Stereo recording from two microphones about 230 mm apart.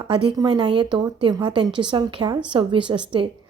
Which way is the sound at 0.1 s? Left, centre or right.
Right.